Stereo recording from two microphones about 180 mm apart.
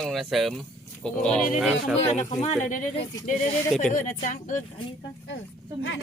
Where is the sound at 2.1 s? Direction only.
40° left (ahead or behind).